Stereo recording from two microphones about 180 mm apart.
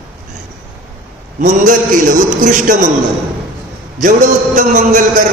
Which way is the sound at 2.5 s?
45° right (ahead or behind).